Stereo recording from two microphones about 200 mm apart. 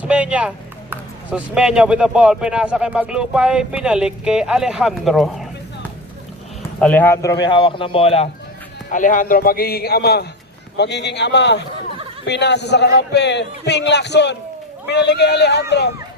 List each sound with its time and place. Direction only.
0.0 s a sound: 5° right (ahead or behind)
1.5 s speech: 5° right (ahead or behind)
6.7 s speech: 5° left (ahead or behind); by 8.3 s 30° left (ahead or behind)
8.9 s a man's voice: 40° left (ahead or behind); by 15.6 s 55° left (ahead or behind)